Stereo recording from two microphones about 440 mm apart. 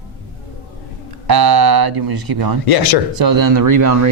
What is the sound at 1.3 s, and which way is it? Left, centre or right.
Speech, right.